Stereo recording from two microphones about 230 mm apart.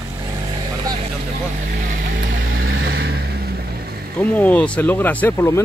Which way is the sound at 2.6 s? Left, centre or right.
Right.